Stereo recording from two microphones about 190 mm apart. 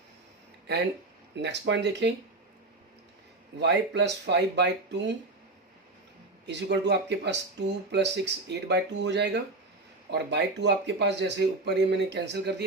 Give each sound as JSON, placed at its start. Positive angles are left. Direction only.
{"t": 1.4, "sound": "speech", "side_deg": -65}
{"t": 3.6, "sound": "speech", "side_deg": -65}
{"t": 6.4, "sound": "speech", "side_deg": -65}